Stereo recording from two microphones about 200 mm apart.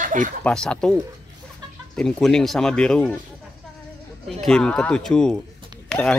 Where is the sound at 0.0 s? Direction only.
40° right (ahead or behind).